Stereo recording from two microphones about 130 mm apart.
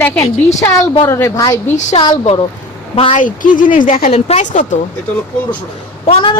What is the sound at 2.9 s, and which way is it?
Speech, 45° left (ahead or behind).